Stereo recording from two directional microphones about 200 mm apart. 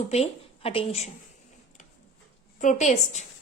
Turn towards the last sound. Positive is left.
turn(degrees=35)  # may be behind; listen again after turning